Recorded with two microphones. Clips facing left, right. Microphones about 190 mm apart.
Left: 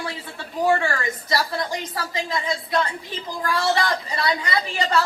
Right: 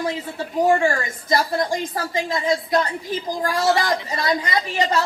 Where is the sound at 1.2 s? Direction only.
45° right (ahead or behind).